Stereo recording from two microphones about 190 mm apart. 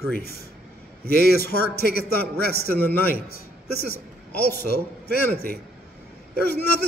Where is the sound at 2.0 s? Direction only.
50° left (ahead or behind).